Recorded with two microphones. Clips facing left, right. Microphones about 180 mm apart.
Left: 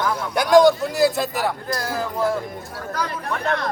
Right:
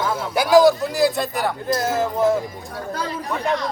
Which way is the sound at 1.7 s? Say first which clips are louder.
Right 5 dB; 20° right (ahead or behind).